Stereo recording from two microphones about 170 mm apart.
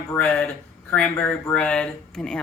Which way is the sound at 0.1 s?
5° left (ahead or behind).